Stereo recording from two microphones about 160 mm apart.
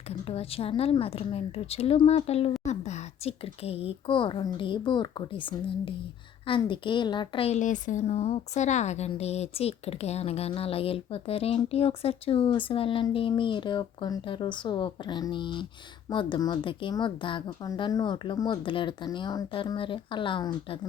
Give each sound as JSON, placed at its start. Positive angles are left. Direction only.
{"t": 0.1, "sound": "a woman's voice", "side_deg": 40}